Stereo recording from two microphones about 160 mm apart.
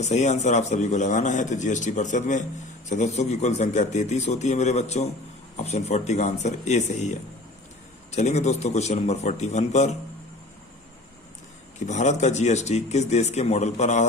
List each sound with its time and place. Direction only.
0.0 s speech: 45° left (ahead or behind)
11.9 s speech: 50° left (ahead or behind)